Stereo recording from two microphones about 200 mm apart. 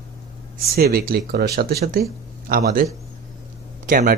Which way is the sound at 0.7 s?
50° right (ahead or behind).